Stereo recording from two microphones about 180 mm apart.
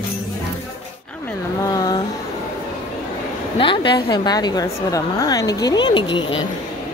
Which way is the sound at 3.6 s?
25° left (ahead or behind).